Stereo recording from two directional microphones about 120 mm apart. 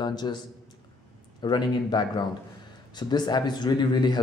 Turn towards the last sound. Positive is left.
turn(degrees=35)  # may be behind; listen again after turning